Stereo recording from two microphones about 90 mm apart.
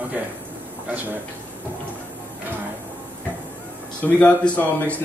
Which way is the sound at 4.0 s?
15° left (ahead or behind).